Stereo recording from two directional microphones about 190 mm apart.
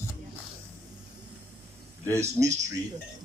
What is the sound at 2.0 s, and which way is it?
Speech, 15° right (ahead or behind).